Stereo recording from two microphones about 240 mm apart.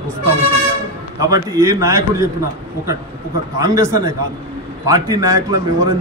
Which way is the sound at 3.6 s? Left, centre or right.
Centre.